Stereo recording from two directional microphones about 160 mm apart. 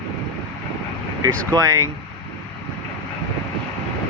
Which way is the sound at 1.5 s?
20° right (ahead or behind).